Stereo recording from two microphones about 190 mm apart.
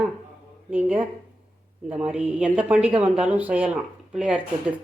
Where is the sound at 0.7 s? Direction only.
10° right (ahead or behind).